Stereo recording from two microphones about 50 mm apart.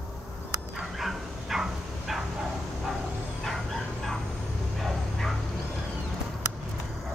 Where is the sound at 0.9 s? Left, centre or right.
Centre.